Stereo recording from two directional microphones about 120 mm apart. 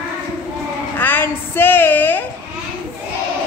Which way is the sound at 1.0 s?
15° left (ahead or behind).